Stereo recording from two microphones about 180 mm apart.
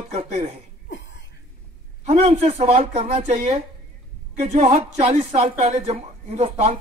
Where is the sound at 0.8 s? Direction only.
80° left.